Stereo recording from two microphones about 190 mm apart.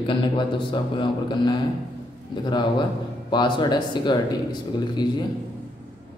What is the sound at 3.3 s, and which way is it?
Speech, 25° left (ahead or behind).